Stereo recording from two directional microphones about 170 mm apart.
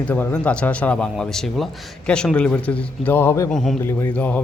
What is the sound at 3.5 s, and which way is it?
Speech, centre (ahead or behind).